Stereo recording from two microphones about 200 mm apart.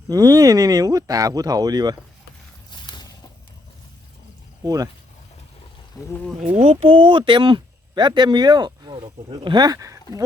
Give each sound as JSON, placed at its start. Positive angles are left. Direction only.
{"t": 0.1, "sound": "speech", "side_deg": -15}
{"t": 2.6, "sound": "a sound", "side_deg": 20}
{"t": 4.6, "sound": "speech", "side_deg": -20}
{"t": 6.0, "sound": "speech", "side_deg": 15}
{"t": 6.6, "sound": "speech", "side_deg": -30}